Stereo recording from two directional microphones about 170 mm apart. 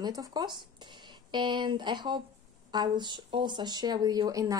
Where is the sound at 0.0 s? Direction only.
20° right (ahead or behind).